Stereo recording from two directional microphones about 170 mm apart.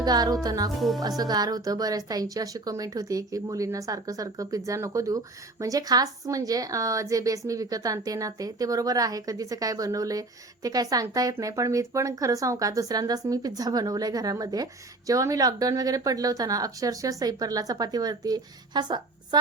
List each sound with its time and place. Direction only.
0.0 s a woman's voice: 25° right (ahead or behind)
0.8 s speech: centre (ahead or behind)
1.0 s a woman's voice: 20° right (ahead or behind)